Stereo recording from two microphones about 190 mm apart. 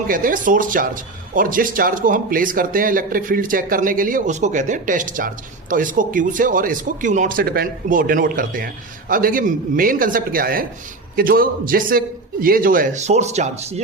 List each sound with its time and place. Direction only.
0.1 s speech: 45° right (ahead or behind)